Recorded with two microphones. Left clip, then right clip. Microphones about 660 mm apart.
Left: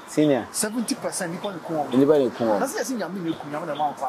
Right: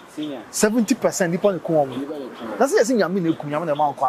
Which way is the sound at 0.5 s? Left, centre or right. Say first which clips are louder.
Right 8 dB; right.